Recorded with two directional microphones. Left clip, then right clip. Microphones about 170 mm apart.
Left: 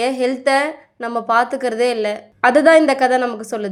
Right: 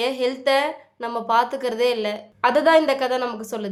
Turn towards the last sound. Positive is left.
turn(degrees=20)  # may be behind; listen again after turning